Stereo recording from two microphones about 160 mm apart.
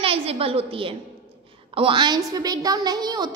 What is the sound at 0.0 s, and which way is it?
A woman's voice, 35° right (ahead or behind).